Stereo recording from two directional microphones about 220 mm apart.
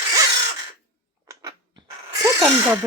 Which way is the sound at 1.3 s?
15° right (ahead or behind).